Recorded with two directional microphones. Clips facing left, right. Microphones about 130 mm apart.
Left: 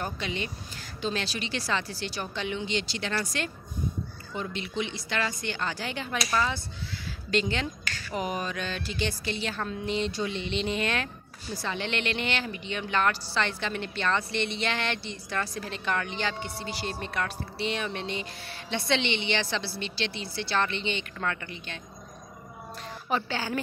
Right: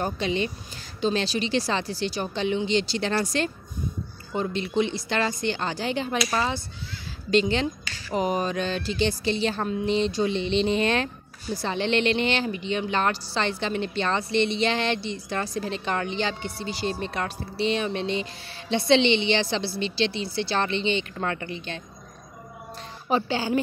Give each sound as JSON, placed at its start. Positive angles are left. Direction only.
{"t": 0.0, "sound": "speech", "side_deg": -25}
{"t": 23.0, "sound": "speech", "side_deg": -20}